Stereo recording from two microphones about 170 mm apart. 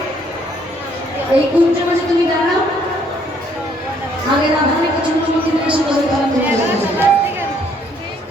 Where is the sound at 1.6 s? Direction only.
10° right (ahead or behind).